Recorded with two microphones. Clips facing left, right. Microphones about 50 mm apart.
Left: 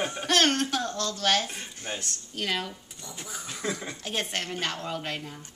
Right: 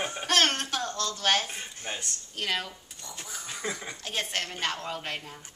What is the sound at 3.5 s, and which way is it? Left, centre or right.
Speech, centre.